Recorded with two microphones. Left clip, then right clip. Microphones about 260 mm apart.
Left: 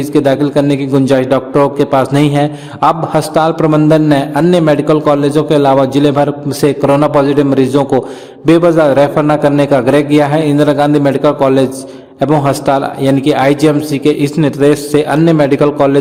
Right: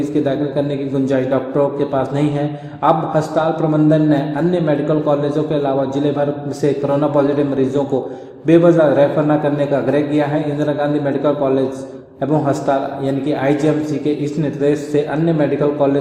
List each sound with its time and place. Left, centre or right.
0.0 s a man's voice: left